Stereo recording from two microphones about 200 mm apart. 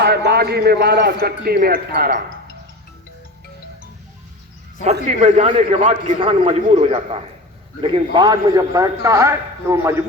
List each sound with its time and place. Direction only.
0.0 s a man's voice: 55° right (ahead or behind)
4.8 s a man's voice: 35° right (ahead or behind); by 9.9 s 15° right (ahead or behind)